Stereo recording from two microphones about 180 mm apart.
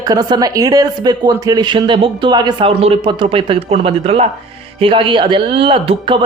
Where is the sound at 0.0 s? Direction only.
20° right (ahead or behind).